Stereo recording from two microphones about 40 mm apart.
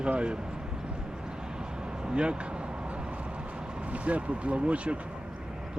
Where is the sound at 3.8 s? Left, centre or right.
Right.